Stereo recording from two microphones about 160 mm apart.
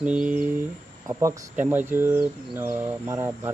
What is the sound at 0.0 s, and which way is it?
Speech, 10° right (ahead or behind).